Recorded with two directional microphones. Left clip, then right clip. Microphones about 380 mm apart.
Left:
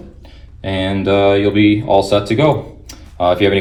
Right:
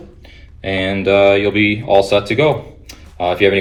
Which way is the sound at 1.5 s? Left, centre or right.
Centre.